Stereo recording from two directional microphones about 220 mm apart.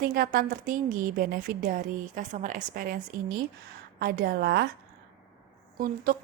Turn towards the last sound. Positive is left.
turn(degrees=-40)  # may be behind; listen again after turning